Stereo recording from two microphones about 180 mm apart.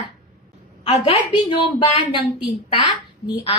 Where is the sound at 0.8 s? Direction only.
30° left (ahead or behind).